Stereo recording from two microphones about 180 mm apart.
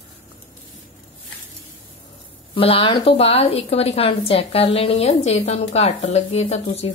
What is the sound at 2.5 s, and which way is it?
A woman's voice, 30° left (ahead or behind).